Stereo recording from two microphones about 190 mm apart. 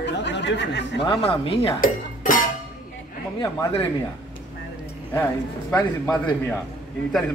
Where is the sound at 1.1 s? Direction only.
30° left (ahead or behind).